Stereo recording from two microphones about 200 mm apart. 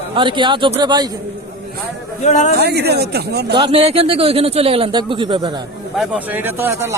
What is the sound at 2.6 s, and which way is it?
Speech, 55° right (ahead or behind).